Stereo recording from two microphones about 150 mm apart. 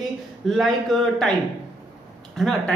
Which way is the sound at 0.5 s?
Centre (ahead or behind).